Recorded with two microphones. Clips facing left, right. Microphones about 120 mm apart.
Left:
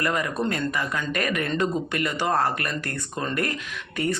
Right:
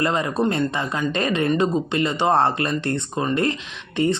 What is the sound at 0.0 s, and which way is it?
Speech, 25° right (ahead or behind).